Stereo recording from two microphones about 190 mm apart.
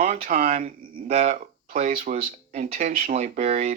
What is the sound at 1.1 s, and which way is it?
Speech, 35° right (ahead or behind).